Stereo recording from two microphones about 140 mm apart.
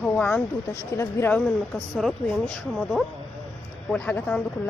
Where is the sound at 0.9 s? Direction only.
15° left (ahead or behind).